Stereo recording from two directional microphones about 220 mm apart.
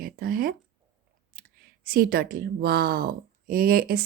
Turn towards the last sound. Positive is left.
turn(degrees=-45)  # may be behind; listen again after turning